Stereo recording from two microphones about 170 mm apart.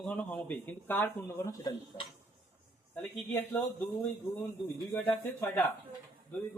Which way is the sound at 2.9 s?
10° left (ahead or behind).